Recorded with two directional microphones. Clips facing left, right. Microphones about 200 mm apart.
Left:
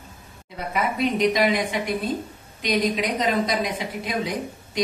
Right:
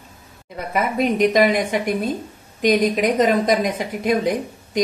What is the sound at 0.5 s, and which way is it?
A woman's voice, 50° right (ahead or behind).